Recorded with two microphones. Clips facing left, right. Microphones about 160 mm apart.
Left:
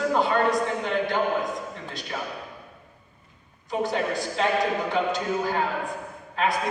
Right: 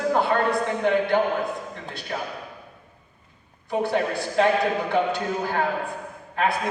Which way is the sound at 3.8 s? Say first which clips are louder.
Right 2 dB; 60° right (ahead or behind).